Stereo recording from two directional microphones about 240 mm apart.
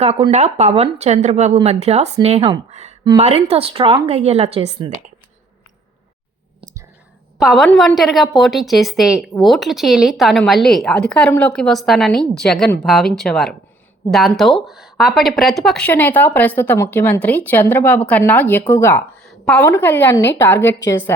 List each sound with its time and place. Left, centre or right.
0.0 s speech: right
7.4 s speech: centre